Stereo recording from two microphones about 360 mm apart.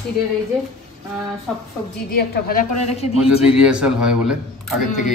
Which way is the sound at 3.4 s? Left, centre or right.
Centre.